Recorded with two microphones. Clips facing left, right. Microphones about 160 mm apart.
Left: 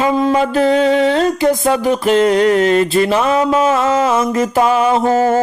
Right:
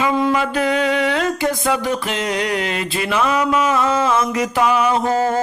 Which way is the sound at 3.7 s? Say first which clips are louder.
Left 3 dB; 25° left (ahead or behind).